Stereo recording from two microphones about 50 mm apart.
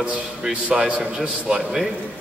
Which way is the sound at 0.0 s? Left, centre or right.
Right.